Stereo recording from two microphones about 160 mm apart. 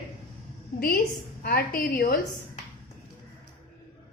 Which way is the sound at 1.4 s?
70° left (ahead or behind).